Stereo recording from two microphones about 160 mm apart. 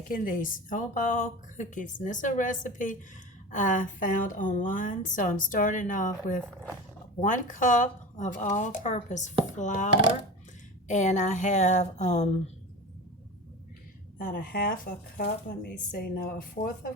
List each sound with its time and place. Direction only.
0.1 s a woman's voice: 60° left (ahead or behind)
14.2 s speech: 65° left (ahead or behind)
15.9 s a woman's voice: 65° left (ahead or behind)